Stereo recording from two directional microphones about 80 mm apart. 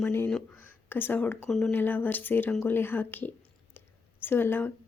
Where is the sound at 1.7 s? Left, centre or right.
Left.